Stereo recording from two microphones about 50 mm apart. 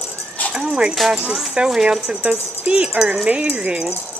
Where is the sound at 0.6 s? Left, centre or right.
Centre.